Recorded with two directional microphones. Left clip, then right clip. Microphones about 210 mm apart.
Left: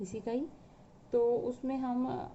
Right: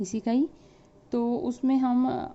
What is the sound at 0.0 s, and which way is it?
A woman's voice, 40° right (ahead or behind).